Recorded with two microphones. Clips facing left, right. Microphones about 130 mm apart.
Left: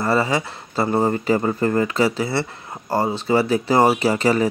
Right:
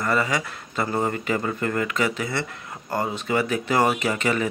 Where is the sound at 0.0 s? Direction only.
30° left (ahead or behind).